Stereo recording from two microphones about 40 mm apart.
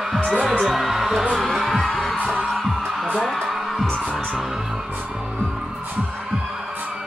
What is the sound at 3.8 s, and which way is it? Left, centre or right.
Music, left.